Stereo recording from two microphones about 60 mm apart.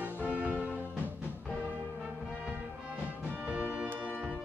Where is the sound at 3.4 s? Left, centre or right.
Right.